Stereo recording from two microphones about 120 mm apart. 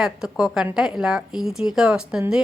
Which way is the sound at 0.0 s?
5° right (ahead or behind).